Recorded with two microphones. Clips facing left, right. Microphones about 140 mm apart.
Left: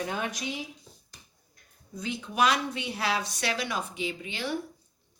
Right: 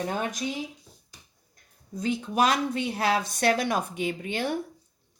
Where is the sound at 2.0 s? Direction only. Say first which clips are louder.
Right 3 dB; 45° right (ahead or behind).